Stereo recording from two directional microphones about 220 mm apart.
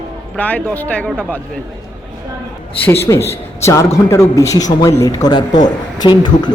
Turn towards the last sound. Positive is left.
turn(degrees=20)  # may be behind; listen again after turning